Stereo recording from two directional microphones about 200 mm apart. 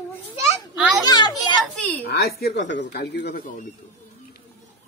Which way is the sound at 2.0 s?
55° left (ahead or behind).